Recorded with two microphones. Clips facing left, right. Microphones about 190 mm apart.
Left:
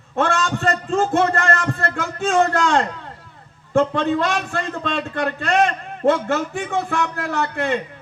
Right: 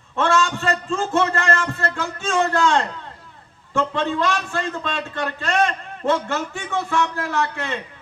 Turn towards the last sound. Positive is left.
turn(degrees=55)  # may be behind; listen again after turning